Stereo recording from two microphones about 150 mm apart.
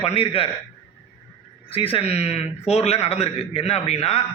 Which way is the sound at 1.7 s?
40° left (ahead or behind).